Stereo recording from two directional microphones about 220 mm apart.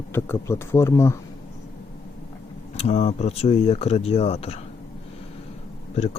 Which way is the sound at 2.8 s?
30° left (ahead or behind).